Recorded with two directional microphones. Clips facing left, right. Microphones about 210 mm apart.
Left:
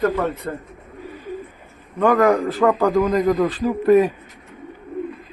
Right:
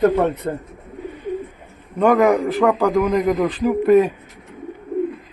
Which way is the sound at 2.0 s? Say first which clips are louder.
Right 1 dB; 10° right (ahead or behind).